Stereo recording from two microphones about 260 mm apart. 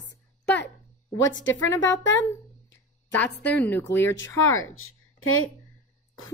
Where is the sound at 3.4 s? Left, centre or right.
Centre.